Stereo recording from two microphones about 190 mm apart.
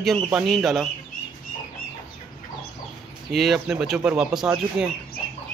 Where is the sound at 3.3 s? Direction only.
Centre (ahead or behind).